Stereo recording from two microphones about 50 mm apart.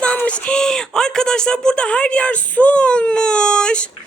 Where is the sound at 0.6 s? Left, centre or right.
Centre.